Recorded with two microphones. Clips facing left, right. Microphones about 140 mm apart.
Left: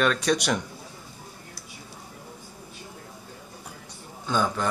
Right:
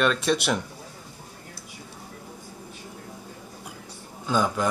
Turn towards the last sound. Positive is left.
turn(degrees=-10)  # may be behind; listen again after turning